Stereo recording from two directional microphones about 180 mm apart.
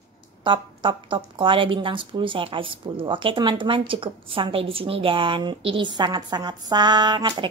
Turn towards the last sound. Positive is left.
turn(degrees=-25)  # may be behind; listen again after turning